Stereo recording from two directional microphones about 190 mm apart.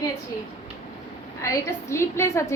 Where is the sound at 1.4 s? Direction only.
15° left (ahead or behind).